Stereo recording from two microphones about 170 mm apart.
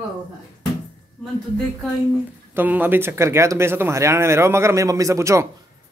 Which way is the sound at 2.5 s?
10° right (ahead or behind).